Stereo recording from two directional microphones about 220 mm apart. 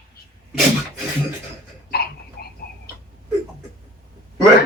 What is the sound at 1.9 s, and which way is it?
Dog, 45° left (ahead or behind).